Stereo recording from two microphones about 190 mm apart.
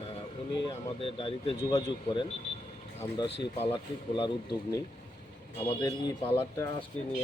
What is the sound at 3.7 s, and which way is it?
Speech, 25° left (ahead or behind).